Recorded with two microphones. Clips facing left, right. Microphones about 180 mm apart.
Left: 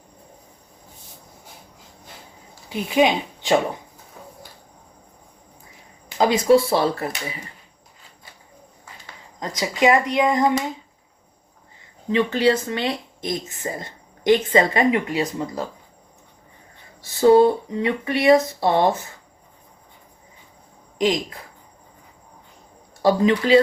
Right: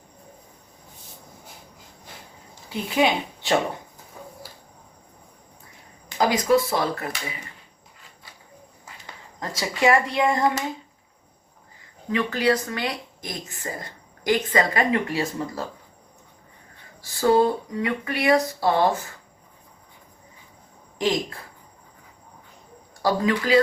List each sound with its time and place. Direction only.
2.6 s speech: 20° left (ahead or behind)
6.1 s a woman's voice: 25° left (ahead or behind)
9.6 s a woman's voice: 20° left (ahead or behind)
12.0 s a woman's voice: 25° left (ahead or behind)
17.0 s a woman's voice: 25° left (ahead or behind)
21.0 s a woman's voice: 20° left (ahead or behind)
23.0 s a woman's voice: 25° left (ahead or behind)